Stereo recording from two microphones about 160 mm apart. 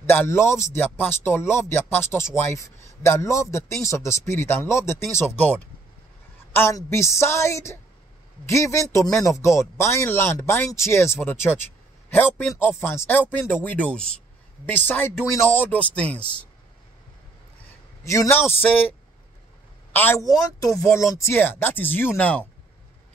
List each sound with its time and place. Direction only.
0.0 s speech: 15° left (ahead or behind)
18.0 s a man's voice: 20° left (ahead or behind)
19.9 s speech: 10° left (ahead or behind)